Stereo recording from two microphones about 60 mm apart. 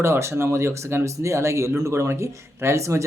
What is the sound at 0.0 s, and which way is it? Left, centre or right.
Speech, right.